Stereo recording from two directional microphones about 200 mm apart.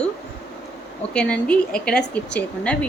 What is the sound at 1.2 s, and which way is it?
A woman's voice, 5° left (ahead or behind).